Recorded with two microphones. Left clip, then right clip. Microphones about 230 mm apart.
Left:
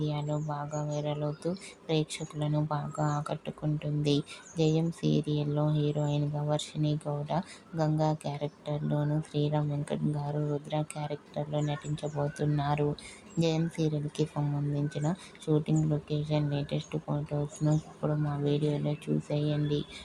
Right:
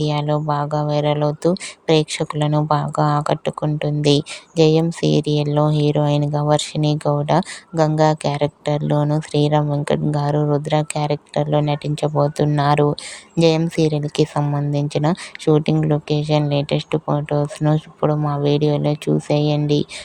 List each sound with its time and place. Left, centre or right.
0.0 s speech: right